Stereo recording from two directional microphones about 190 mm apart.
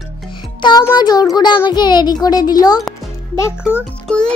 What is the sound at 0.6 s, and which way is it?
A child's voice, 20° left (ahead or behind).